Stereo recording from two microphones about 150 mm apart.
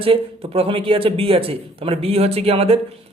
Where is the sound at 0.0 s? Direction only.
40° right (ahead or behind).